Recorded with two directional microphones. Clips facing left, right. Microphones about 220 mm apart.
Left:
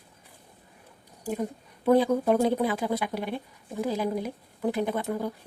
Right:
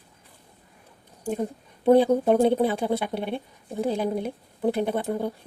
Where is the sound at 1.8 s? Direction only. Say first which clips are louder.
Right 4 dB; 30° right (ahead or behind).